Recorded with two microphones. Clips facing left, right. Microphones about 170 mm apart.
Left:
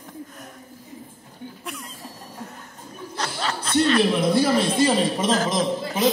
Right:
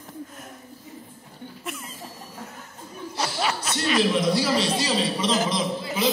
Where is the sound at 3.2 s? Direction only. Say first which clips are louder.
Right 1 dB; 10° right (ahead or behind).